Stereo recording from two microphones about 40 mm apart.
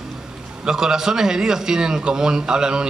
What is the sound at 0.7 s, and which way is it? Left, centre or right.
A man's voice, centre.